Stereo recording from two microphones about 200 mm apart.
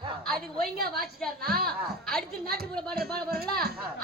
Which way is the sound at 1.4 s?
50° right (ahead or behind).